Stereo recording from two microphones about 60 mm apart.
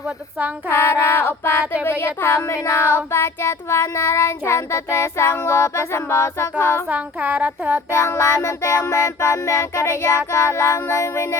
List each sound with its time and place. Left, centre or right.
0.7 s child singing: left
6.8 s a sound: right
7.9 s child singing: left